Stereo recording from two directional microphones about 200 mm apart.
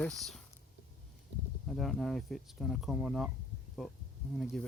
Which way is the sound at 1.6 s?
Centre (ahead or behind).